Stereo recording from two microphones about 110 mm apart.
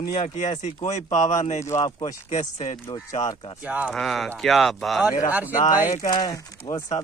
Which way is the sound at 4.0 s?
5° left (ahead or behind).